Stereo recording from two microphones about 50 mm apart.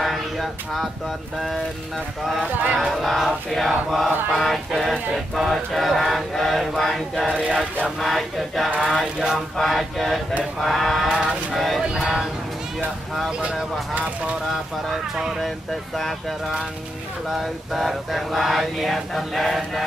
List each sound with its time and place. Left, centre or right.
0.0 s a sound: centre
2.8 s mantra: centre
8.7 s a sound: centre
9.0 s speech: centre
9.6 s mantra: centre
11.1 s speech: centre
11.5 s mantra: centre
12.0 s speech: centre
14.5 s speech: centre
17.4 s mantra: centre